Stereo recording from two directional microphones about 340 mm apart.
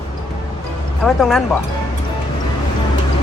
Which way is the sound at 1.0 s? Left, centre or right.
Centre.